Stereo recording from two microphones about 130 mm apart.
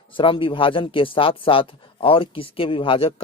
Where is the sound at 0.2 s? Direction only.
40° left (ahead or behind).